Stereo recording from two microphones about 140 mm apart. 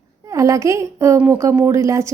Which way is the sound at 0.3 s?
25° right (ahead or behind).